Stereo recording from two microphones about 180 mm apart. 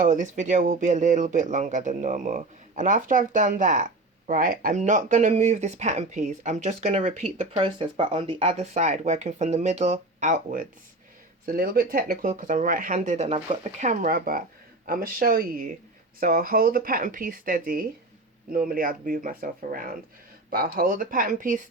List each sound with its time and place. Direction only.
0.0 s speech: 45° right (ahead or behind)
7.5 s speech: 30° right (ahead or behind); by 21.6 s 45° right (ahead or behind)